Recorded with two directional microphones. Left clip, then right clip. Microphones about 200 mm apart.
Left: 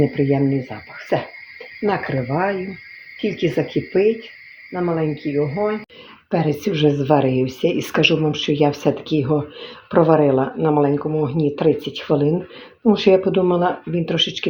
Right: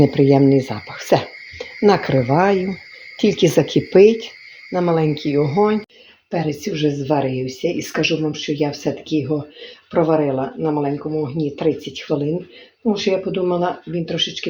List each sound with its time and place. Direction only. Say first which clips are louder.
0.2 s speech: right 6 dB; 45° right (ahead or behind)
6.3 s speech: left 2 dB; 25° left (ahead or behind)